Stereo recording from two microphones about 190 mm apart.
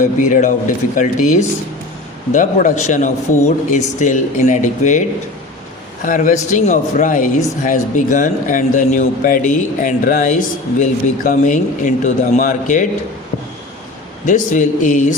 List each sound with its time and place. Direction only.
0.2 s speech: 40° left (ahead or behind)
14.3 s speech: 40° left (ahead or behind)